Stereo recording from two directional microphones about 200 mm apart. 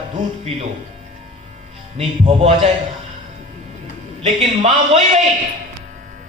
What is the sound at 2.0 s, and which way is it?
Speech, 30° right (ahead or behind).